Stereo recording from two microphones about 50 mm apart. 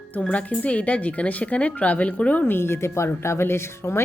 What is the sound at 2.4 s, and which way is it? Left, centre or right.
Speech, left.